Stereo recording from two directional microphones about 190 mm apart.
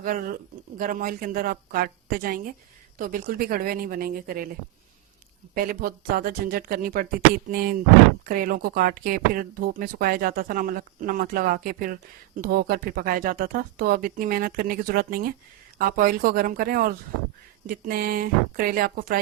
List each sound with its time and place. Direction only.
0.0 s speech: 45° right (ahead or behind)
5.5 s speech: 50° right (ahead or behind)